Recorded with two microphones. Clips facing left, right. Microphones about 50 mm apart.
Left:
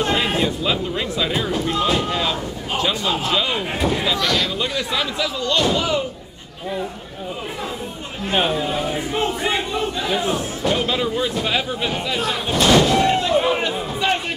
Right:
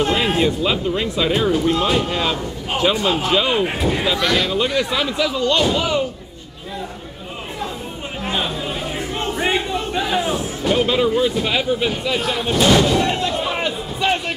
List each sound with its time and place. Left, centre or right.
0.0 s speech: centre
8.3 s speech: left
10.0 s speech: centre